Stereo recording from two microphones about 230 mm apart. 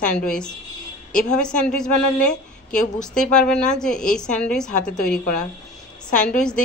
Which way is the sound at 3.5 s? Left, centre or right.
Centre.